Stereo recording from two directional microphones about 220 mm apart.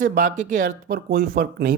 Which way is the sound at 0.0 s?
40° right (ahead or behind).